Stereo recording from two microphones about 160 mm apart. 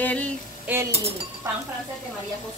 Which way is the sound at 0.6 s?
15° right (ahead or behind).